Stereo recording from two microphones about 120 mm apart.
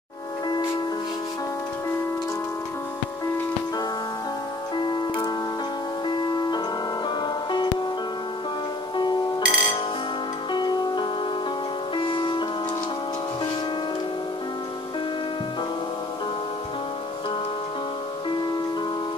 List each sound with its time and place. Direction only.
4.7 s music: 35° left (ahead or behind)
8.9 s music: 40° left (ahead or behind)